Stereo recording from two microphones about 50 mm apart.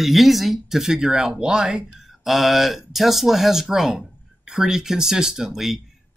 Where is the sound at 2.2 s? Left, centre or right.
Centre.